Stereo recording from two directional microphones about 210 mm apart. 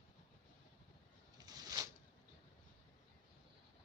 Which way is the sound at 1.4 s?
15° right (ahead or behind).